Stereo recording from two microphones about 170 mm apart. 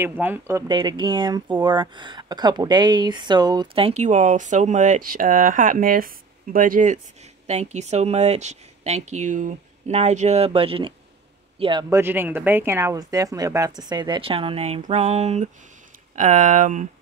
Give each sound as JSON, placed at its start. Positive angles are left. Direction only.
{"t": 0.0, "sound": "speech", "side_deg": -15}
{"t": 0.7, "sound": "speech", "side_deg": -25}
{"t": 11.9, "sound": "speech", "side_deg": -10}